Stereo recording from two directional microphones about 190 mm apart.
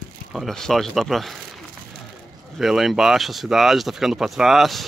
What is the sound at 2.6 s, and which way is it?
Speech, centre (ahead or behind).